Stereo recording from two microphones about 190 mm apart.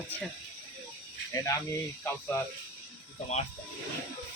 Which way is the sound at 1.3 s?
15° left (ahead or behind).